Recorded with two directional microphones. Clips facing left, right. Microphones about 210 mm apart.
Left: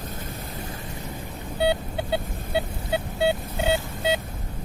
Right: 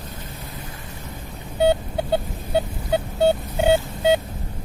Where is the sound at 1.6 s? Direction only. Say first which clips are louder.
Right 5 dB; 45° right (ahead or behind).